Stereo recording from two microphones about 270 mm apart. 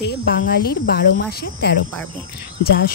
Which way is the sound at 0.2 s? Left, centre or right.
Left.